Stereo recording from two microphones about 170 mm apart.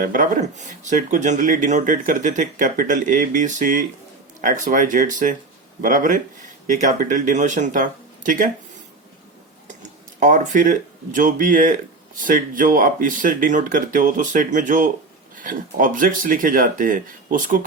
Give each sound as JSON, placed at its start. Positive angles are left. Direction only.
{"t": 0.0, "sound": "speech", "side_deg": -50}
{"t": 10.2, "sound": "speech", "side_deg": -45}